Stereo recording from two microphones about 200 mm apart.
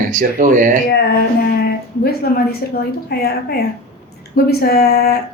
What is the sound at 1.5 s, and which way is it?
A woman's voice, 50° left (ahead or behind).